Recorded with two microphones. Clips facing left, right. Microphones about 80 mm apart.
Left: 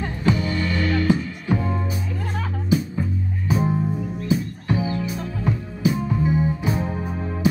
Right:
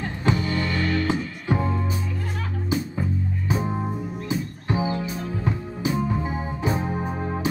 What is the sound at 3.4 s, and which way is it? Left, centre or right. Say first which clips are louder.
Music: left 5 dB; right.